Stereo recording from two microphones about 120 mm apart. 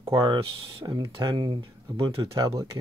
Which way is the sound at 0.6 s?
50° right (ahead or behind).